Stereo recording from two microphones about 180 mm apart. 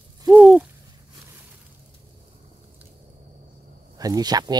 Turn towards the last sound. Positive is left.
turn(degrees=-20)  # may be behind; listen again after turning